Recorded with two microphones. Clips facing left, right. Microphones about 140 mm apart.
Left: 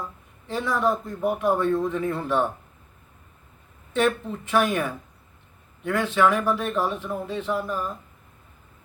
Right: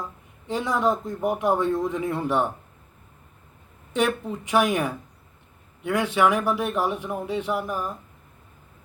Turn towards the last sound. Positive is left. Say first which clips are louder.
# even
turn(degrees=-15)  # may be behind; listen again after turning